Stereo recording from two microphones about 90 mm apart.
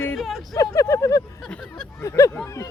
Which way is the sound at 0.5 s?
40° left (ahead or behind).